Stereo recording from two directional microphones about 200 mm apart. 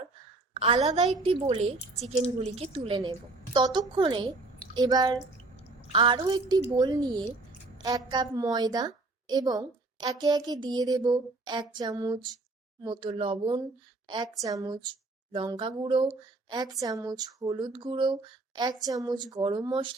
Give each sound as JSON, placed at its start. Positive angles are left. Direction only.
{"t": 0.5, "sound": "a woman's voice", "side_deg": -30}
{"t": 14.4, "sound": "a woman's voice", "side_deg": -15}